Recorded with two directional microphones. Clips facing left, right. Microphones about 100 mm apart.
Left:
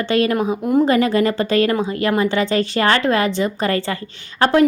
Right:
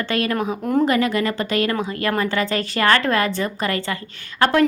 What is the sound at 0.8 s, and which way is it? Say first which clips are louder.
Speech: left 4 dB; 30° left (ahead or behind).